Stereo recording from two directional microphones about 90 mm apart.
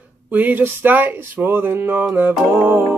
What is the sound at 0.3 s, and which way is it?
Speech, 20° right (ahead or behind).